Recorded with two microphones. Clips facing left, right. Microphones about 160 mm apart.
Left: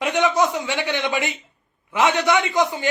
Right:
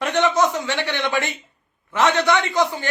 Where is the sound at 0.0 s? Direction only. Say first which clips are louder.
Right 1 dB; 15° left (ahead or behind).